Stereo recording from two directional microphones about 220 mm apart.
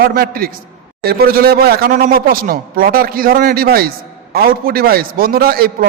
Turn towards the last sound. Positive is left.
turn(degrees=-45)  # may be behind; listen again after turning